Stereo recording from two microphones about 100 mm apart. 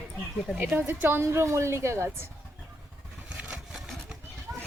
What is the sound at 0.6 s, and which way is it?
Speech, 20° right (ahead or behind).